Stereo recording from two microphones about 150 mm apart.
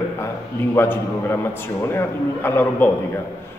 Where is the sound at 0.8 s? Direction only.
15° left (ahead or behind).